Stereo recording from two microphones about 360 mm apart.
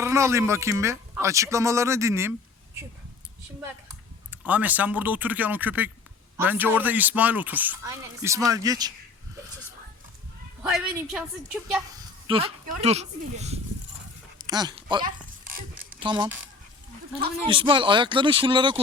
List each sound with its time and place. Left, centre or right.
0.0 s a man's voice: centre
4.3 s a woman's voice: centre
10.6 s a woman's voice: centre
12.3 s a man's voice: centre
15.5 s zipper: centre
17.5 s a man's voice: centre